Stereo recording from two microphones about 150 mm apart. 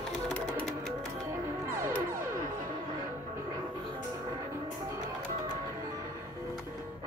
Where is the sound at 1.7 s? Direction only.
20° right (ahead or behind).